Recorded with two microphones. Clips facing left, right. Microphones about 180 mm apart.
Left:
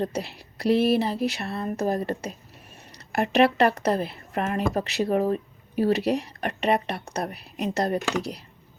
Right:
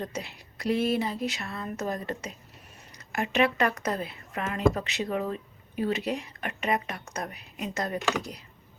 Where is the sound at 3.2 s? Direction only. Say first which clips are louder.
Left 5 dB; 65° left (ahead or behind).